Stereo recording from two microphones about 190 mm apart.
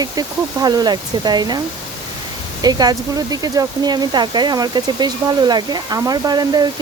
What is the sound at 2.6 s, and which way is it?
Speech, 20° right (ahead or behind).